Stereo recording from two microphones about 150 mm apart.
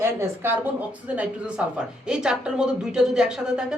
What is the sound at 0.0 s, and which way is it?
A woman's voice, 15° right (ahead or behind).